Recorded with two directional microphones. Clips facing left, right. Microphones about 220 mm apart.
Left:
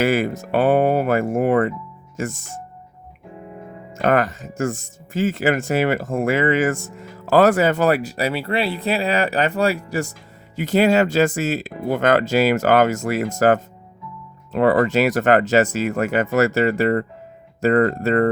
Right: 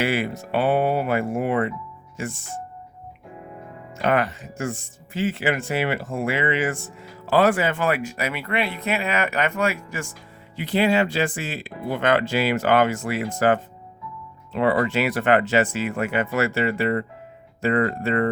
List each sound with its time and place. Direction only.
0.0 s speech: 45° left (ahead or behind)
3.9 s speech: 45° left (ahead or behind)